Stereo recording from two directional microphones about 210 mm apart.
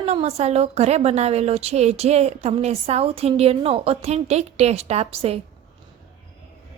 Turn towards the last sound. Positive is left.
turn(degrees=-30)  # may be behind; listen again after turning